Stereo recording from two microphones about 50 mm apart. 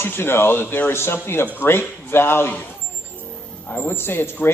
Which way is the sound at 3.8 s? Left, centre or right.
Left.